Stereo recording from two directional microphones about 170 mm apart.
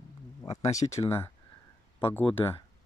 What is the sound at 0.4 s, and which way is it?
Speech, 20° left (ahead or behind).